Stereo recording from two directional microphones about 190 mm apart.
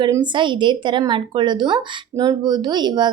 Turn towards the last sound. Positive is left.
turn(degrees=-25)  # may be behind; listen again after turning